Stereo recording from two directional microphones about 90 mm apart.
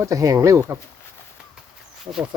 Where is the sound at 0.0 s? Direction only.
40° right (ahead or behind).